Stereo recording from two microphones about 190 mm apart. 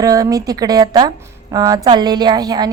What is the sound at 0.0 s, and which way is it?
A woman's voice, 20° right (ahead or behind).